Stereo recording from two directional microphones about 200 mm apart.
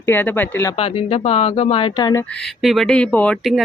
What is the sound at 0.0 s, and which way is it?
Speech, 10° left (ahead or behind).